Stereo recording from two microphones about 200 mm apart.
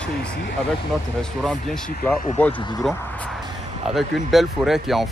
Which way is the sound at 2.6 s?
20° left (ahead or behind).